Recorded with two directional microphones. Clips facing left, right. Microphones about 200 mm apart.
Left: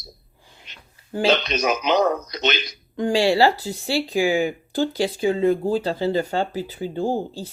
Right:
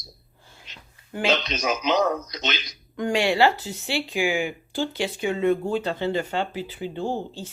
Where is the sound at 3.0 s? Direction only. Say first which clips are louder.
Left 3 dB; 30° left (ahead or behind).